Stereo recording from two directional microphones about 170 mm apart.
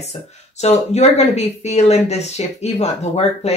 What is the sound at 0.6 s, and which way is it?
Speech, 40° left (ahead or behind).